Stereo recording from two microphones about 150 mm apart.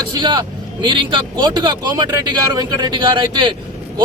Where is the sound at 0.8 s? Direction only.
30° right (ahead or behind).